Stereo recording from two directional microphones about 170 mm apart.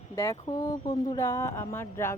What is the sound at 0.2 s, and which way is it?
Speech, 20° left (ahead or behind).